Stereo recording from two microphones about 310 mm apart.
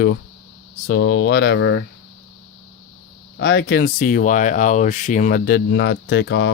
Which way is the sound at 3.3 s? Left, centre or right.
Left.